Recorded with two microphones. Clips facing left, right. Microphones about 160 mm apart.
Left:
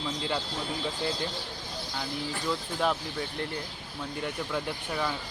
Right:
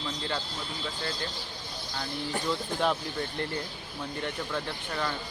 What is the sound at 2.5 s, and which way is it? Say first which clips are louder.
Speech: even; centre (ahead or behind).